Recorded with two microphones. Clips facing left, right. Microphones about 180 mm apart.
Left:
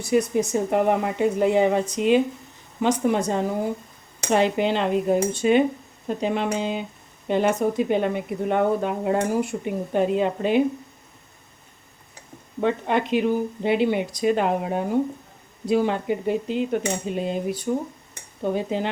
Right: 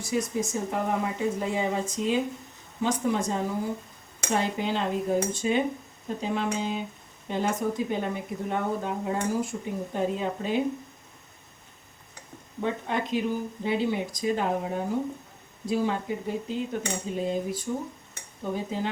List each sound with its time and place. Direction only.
0.0 s speech: 65° left (ahead or behind)
12.5 s speech: 75° left (ahead or behind)